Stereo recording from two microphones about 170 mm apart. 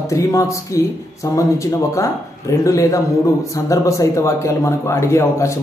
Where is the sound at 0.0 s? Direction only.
20° left (ahead or behind).